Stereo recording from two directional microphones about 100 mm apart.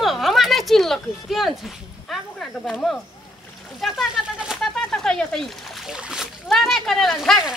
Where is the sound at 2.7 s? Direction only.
10° left (ahead or behind); by 6.3 s 10° right (ahead or behind).